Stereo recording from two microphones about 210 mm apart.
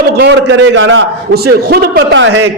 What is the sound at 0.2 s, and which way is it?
A man's voice, 60° right (ahead or behind).